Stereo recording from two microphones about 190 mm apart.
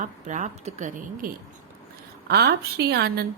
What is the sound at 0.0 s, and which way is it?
Speech, 40° right (ahead or behind).